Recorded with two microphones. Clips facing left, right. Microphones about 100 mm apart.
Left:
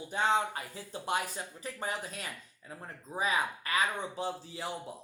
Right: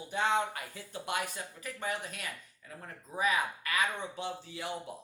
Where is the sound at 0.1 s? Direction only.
30° left (ahead or behind).